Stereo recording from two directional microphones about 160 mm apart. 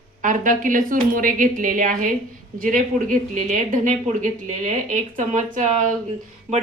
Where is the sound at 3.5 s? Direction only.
50° right (ahead or behind).